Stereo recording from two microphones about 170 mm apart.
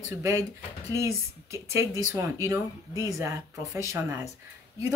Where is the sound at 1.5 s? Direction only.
15° right (ahead or behind).